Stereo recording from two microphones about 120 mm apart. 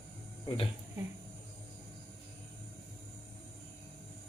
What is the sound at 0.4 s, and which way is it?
Speech, 50° left (ahead or behind).